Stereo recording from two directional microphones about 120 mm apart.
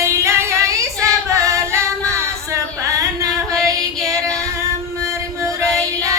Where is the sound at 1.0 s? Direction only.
25° right (ahead or behind).